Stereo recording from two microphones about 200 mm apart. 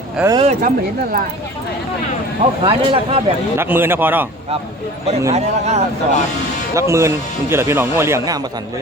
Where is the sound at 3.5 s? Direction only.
10° right (ahead or behind).